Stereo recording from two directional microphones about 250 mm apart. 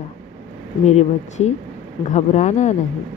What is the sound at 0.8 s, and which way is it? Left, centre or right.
A woman's voice, left.